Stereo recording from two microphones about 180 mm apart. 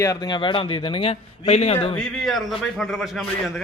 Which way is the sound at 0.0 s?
20° left (ahead or behind).